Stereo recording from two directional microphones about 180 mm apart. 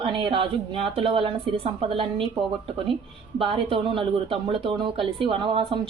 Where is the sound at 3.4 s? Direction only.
30° right (ahead or behind).